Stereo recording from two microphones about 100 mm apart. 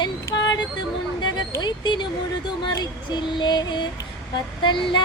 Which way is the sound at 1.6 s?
50° left (ahead or behind).